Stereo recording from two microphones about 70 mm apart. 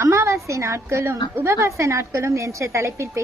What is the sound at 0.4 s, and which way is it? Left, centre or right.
A woman's voice, right.